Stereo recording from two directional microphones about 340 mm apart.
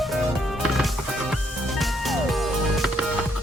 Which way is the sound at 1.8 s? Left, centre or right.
Centre.